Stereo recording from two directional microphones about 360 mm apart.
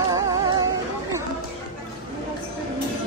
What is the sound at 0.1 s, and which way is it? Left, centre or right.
Music, centre.